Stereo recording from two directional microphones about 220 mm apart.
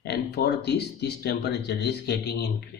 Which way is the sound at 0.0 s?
50° left (ahead or behind).